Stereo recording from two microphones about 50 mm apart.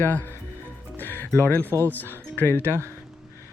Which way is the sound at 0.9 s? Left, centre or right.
Left.